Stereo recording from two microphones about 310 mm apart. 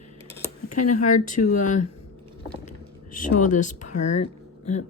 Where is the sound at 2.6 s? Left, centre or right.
Left.